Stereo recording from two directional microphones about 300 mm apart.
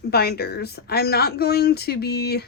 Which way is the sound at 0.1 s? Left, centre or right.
Left.